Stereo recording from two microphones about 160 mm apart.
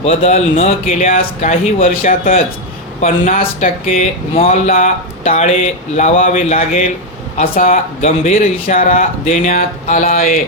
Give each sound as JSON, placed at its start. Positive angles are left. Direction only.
{"t": 0.0, "sound": "speech", "side_deg": 40}